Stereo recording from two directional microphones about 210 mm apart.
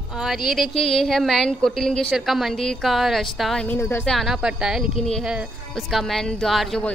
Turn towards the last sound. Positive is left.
turn(degrees=5)  # may be behind; listen again after turning